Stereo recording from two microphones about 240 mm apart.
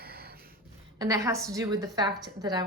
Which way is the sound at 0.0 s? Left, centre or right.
Right.